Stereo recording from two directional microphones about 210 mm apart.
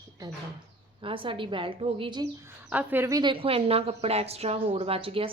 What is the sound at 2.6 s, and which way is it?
A woman's voice, 10° right (ahead or behind).